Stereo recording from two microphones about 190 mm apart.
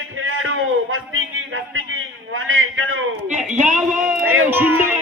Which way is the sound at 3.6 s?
40° right (ahead or behind).